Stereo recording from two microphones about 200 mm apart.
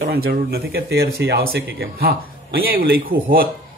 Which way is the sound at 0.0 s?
50° right (ahead or behind).